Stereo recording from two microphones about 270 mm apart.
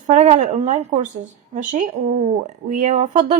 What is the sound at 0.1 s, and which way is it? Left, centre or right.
Speech, right.